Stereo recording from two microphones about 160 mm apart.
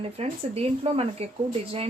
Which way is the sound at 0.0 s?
40° right (ahead or behind).